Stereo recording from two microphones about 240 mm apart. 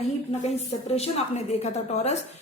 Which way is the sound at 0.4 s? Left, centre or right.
Left.